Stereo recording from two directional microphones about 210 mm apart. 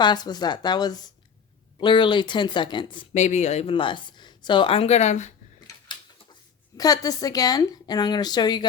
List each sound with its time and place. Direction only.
0.0 s speech: 20° left (ahead or behind)
6.7 s speech: 15° left (ahead or behind)